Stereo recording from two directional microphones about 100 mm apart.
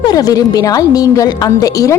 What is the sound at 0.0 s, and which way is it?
A woman's voice, 40° left (ahead or behind).